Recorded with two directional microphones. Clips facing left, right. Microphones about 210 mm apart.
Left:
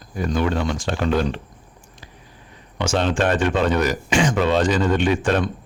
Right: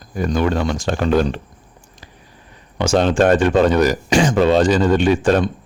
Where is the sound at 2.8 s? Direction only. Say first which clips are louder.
Right 6 dB; 35° right (ahead or behind).